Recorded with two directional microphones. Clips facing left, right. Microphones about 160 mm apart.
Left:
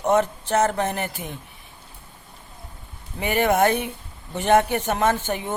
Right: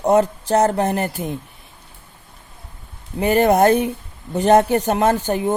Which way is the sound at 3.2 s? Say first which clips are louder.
Right 5 dB; 40° right (ahead or behind).